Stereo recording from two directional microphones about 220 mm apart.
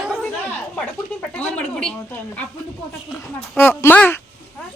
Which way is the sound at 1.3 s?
5° left (ahead or behind).